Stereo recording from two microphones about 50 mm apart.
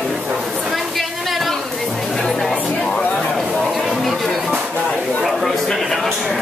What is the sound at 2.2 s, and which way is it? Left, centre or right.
Music, centre.